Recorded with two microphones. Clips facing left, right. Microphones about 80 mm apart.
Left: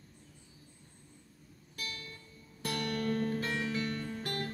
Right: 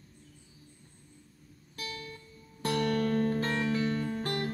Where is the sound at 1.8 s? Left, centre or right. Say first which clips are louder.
Right 4 dB; right.